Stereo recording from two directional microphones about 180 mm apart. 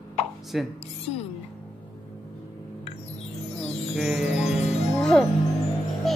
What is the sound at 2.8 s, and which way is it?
Music, 35° left (ahead or behind).